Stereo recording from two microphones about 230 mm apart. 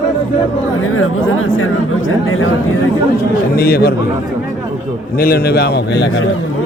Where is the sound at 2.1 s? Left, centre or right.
Left.